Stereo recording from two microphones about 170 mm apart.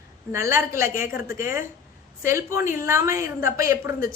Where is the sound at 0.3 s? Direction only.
15° right (ahead or behind).